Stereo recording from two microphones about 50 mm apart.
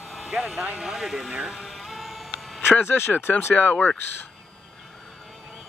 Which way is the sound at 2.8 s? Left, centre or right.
Left.